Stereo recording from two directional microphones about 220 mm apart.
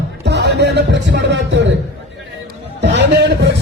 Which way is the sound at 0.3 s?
50° right (ahead or behind).